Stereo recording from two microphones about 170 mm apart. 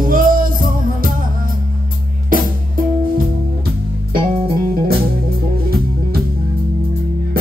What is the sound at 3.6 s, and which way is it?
Music, 60° right (ahead or behind).